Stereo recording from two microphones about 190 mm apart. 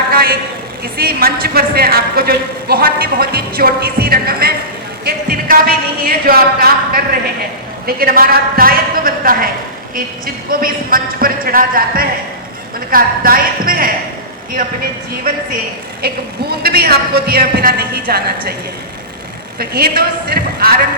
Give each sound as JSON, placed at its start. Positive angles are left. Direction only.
{"t": 0.1, "sound": "a sound", "side_deg": -50}
{"t": 0.9, "sound": "speech", "side_deg": -50}
{"t": 16.0, "sound": "a man's voice", "side_deg": -55}
{"t": 19.5, "sound": "speech", "side_deg": -55}